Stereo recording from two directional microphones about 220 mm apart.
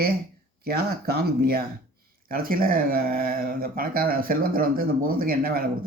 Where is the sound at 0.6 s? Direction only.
45° right (ahead or behind).